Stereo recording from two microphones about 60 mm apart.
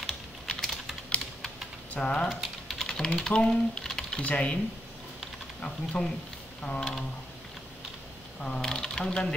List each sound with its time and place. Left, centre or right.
0.5 s typing: centre
2.0 s speech: centre
2.2 s speech: centre
4.2 s speech: left
5.6 s speech: centre
8.4 s speech: centre